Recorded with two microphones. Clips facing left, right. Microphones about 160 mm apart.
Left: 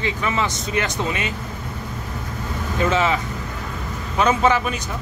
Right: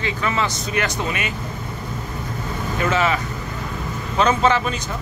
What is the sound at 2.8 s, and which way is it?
Speech, 20° left (ahead or behind).